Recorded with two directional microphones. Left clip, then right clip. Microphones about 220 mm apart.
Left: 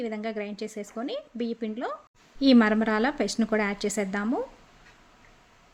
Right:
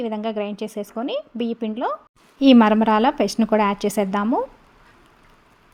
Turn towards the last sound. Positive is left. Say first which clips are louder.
# right 8 dB
turn(degrees=-10)  # may be behind; listen again after turning